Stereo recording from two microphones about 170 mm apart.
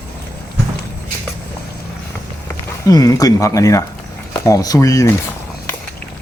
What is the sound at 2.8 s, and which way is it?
Speech, 20° left (ahead or behind).